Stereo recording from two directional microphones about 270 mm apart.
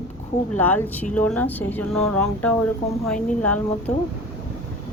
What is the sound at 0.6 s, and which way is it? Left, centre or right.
Speech, centre.